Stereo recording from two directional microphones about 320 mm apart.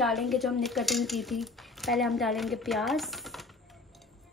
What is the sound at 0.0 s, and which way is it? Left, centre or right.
Speech, centre.